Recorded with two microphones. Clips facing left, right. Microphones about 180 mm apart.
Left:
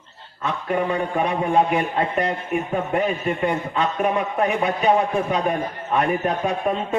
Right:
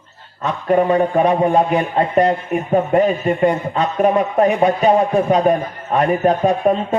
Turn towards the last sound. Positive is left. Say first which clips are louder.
# right 8 dB
turn(degrees=-35)  # may be behind; listen again after turning